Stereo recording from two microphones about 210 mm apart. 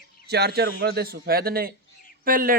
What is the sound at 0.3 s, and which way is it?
A man's voice, 50° right (ahead or behind).